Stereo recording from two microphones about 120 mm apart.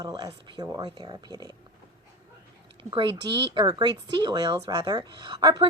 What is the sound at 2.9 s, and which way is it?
A woman's voice, 40° right (ahead or behind).